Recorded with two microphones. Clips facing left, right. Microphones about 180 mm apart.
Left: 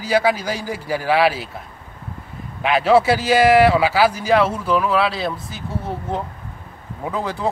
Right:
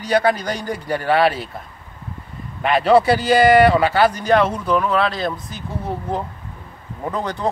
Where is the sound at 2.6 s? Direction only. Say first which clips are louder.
Right 1 dB; centre (ahead or behind).